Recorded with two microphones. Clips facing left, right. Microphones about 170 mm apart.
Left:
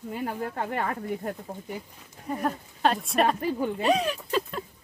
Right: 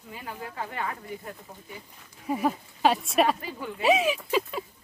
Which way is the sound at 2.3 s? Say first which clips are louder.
Right 2 dB; 5° right (ahead or behind).